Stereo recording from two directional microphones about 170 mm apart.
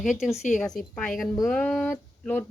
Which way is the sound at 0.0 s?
Centre (ahead or behind).